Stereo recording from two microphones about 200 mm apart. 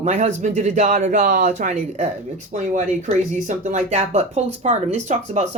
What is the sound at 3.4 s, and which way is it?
A woman's voice, 35° right (ahead or behind).